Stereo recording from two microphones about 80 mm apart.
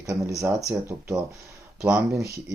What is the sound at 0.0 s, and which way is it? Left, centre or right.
Speech, right.